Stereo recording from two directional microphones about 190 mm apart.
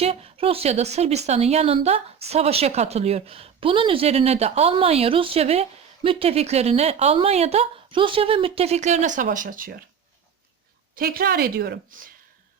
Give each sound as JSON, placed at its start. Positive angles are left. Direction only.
{"t": 0.0, "sound": "a woman's voice", "side_deg": -30}
{"t": 10.9, "sound": "a woman's voice", "side_deg": -50}